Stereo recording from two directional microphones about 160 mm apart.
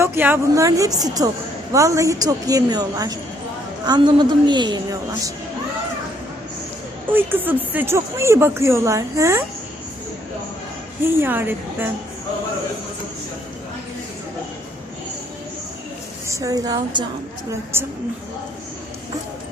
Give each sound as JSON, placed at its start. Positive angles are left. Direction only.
{"t": 0.0, "sound": "a woman's voice", "side_deg": -15}
{"t": 7.1, "sound": "speech", "side_deg": -10}
{"t": 11.0, "sound": "speech", "side_deg": -15}
{"t": 16.2, "sound": "a woman's voice", "side_deg": -20}
{"t": 17.7, "sound": "speech", "side_deg": -15}